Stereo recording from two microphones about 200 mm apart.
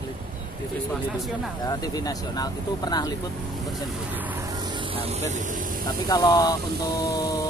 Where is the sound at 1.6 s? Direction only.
20° left (ahead or behind).